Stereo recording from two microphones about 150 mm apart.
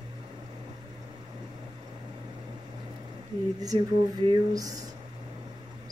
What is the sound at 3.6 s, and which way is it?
Speech, 30° right (ahead or behind).